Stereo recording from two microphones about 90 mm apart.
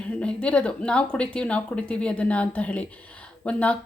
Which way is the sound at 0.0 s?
10° left (ahead or behind).